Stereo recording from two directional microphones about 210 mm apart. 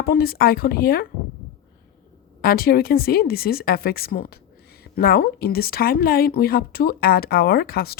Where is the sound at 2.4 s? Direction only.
45° left (ahead or behind).